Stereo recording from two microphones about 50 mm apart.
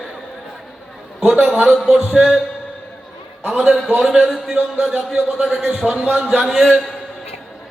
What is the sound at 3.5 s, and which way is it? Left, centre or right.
Speech, centre.